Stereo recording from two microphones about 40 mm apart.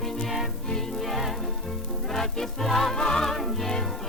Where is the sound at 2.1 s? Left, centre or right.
Centre.